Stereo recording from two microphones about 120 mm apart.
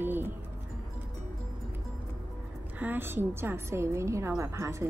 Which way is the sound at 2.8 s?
15° right (ahead or behind).